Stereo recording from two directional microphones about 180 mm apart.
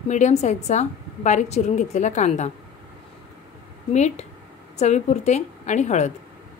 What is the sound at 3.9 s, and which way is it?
A woman's voice, 40° left (ahead or behind).